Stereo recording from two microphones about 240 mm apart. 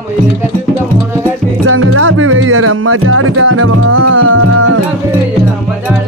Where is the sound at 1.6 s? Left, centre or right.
Right.